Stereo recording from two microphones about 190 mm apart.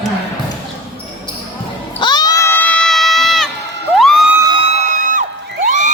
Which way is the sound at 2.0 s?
20° left (ahead or behind).